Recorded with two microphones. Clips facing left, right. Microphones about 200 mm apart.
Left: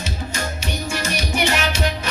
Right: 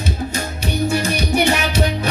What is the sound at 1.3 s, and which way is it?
Music, 60° right (ahead or behind).